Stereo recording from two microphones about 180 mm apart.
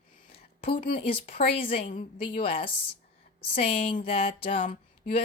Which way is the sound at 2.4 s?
30° left (ahead or behind).